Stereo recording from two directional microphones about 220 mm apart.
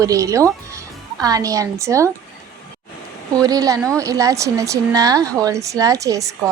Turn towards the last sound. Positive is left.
turn(degrees=-15)  # may be behind; listen again after turning